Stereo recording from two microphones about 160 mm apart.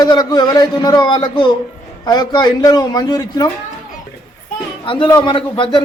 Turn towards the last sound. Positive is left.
turn(degrees=30)  # may be behind; listen again after turning